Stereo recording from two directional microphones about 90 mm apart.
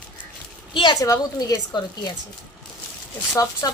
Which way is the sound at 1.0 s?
40° left (ahead or behind).